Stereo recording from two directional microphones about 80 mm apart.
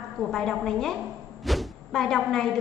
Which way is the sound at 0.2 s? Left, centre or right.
Centre.